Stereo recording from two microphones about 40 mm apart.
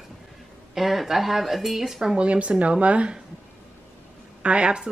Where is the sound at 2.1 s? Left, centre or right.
Right.